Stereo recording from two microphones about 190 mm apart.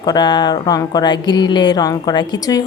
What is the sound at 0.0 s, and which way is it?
Speech, 20° left (ahead or behind).